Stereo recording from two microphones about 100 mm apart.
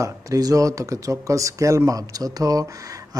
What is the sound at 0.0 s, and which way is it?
Speech, 35° right (ahead or behind).